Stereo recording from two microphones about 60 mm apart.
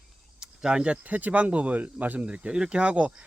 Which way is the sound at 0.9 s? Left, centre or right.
Right.